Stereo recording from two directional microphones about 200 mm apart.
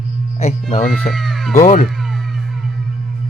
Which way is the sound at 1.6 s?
40° left (ahead or behind).